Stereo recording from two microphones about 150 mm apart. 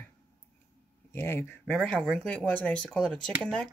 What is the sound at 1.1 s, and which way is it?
Speech, 15° left (ahead or behind).